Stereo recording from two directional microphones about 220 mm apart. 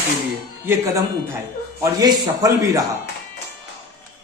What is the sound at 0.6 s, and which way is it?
A man's voice, 10° right (ahead or behind).